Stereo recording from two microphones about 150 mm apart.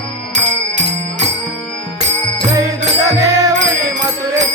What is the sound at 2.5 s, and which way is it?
Music, 25° right (ahead or behind).